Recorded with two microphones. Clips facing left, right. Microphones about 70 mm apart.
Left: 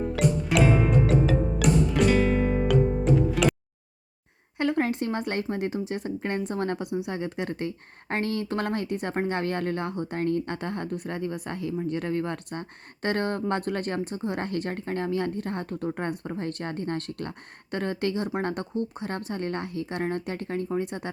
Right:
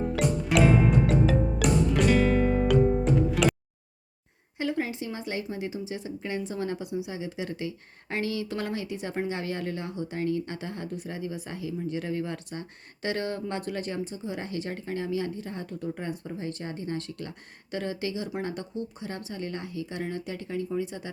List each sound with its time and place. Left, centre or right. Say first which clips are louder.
0.0 s music: left 2 dB; centre
4.5 s speech: left 4 dB; left